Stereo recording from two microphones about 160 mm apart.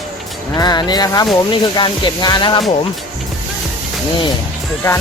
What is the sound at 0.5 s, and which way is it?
Speech, 25° left (ahead or behind).